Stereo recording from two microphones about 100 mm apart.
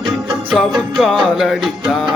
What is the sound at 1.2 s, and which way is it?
Music, 5° right (ahead or behind).